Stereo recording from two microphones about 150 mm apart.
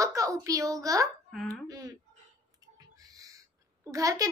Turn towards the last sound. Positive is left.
turn(degrees=-20)  # may be behind; listen again after turning